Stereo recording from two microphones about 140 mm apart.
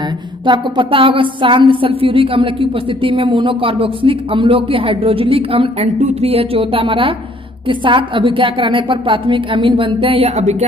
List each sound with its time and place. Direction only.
0.5 s a woman's voice: 40° right (ahead or behind)
5.9 s a woman's voice: 55° right (ahead or behind)